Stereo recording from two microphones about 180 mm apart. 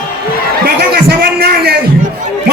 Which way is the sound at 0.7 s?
60° right (ahead or behind).